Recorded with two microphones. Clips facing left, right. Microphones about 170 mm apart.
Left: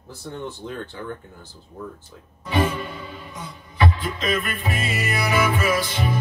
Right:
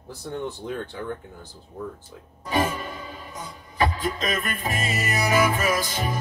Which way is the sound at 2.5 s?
45° right (ahead or behind).